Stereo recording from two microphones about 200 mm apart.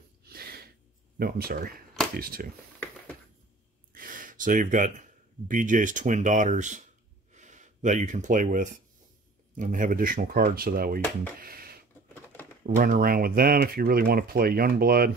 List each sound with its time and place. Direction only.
0.2 s sneeze: 50° right (ahead or behind)
1.1 s speech: 50° right (ahead or behind)
3.9 s gasp: 40° right (ahead or behind)
5.5 s speech: 40° right (ahead or behind)
11.3 s a sound: 50° right (ahead or behind)
12.6 s speech: 40° right (ahead or behind)